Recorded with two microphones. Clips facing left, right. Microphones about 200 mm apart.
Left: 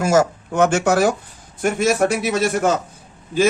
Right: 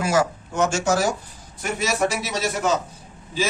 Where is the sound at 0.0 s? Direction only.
45° left (ahead or behind).